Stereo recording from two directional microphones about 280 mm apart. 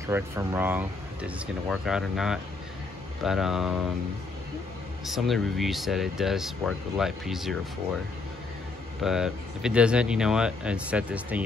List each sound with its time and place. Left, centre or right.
0.0 s speech: centre
5.0 s speech: centre
9.0 s speech: centre